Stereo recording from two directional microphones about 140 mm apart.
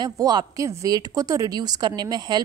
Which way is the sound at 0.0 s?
30° right (ahead or behind).